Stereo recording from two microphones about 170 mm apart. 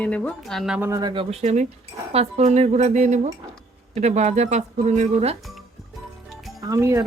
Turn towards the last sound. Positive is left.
turn(degrees=-15)  # may be behind; listen again after turning